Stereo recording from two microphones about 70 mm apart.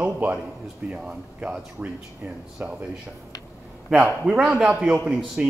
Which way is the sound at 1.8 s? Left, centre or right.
Centre.